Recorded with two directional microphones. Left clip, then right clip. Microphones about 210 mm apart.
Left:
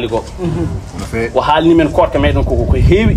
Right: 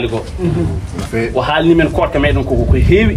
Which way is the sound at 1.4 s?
40° left (ahead or behind).